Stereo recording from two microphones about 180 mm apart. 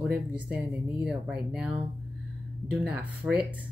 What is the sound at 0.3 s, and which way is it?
Speech, 5° right (ahead or behind).